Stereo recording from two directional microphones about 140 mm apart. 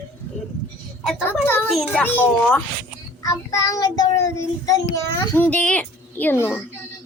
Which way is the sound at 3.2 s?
25° left (ahead or behind).